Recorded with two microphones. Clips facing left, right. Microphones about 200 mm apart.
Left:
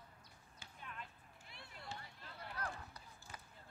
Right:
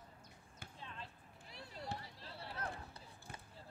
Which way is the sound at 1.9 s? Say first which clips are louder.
Right 4 dB; 35° right (ahead or behind).